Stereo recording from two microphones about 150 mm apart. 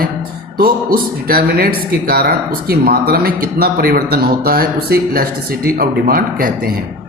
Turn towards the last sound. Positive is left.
turn(degrees=-75)  # may be behind; listen again after turning